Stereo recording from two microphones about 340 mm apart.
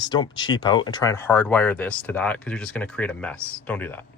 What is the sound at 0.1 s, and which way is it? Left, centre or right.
Speech, centre.